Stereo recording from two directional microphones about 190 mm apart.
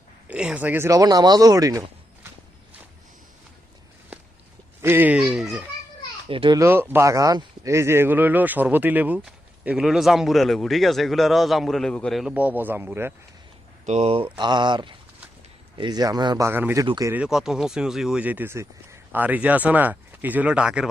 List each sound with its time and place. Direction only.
0.3 s speech: 5° right (ahead or behind)
4.1 s walk: 5° right (ahead or behind)
4.8 s speech: 10° right (ahead or behind)
6.2 s a child's voice: 25° right (ahead or behind)
6.6 s speech: 10° right (ahead or behind)
13.8 s speech: 35° right (ahead or behind)
16.5 s speech: 10° right (ahead or behind)
16.8 s speech: 25° right (ahead or behind)
17.1 s speech: 5° right (ahead or behind)